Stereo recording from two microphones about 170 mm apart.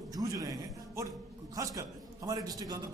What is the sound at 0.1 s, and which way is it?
Music, 20° right (ahead or behind).